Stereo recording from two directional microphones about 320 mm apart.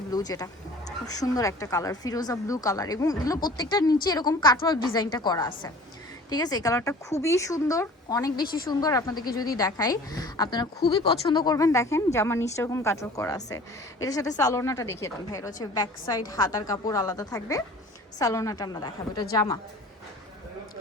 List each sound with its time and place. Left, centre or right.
0.1 s a woman's voice: centre
8.4 s a woman's voice: left
8.8 s a woman's voice: centre